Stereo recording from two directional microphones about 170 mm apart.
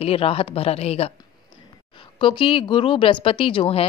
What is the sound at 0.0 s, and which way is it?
Speech, 35° left (ahead or behind).